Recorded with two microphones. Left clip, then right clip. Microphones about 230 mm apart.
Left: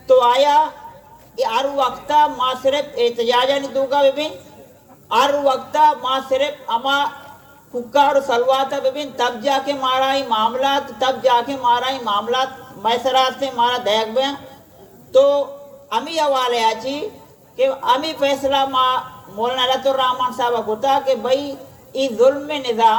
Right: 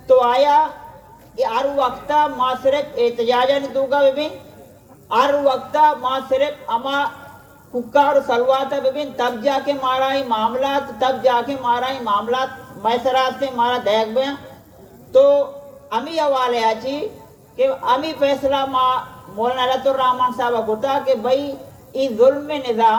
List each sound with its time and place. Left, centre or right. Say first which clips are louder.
0.1 s a woman's voice: left 1 dB; left